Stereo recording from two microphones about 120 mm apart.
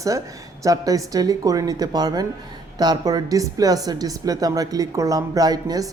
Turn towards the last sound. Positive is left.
turn(degrees=-30)  # may be behind; listen again after turning